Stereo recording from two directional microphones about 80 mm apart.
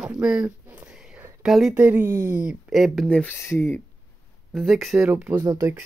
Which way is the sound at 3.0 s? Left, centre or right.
Centre.